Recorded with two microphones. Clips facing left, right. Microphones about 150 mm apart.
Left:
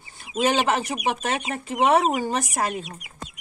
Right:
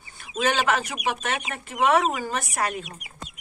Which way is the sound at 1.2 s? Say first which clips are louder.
Left 3 dB; 35° left (ahead or behind).